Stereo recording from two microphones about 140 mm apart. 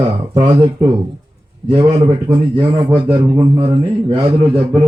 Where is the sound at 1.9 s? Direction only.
45° right (ahead or behind).